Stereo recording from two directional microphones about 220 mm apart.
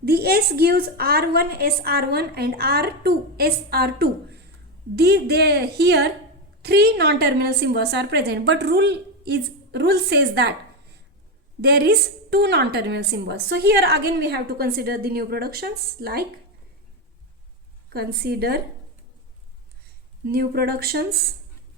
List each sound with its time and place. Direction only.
0.0 s a woman's voice: 45° right (ahead or behind)
11.6 s a woman's voice: 45° right (ahead or behind)
17.9 s a woman's voice: 45° right (ahead or behind)
20.2 s a woman's voice: 45° right (ahead or behind)